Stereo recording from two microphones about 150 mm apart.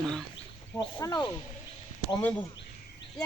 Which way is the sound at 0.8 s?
25° left (ahead or behind).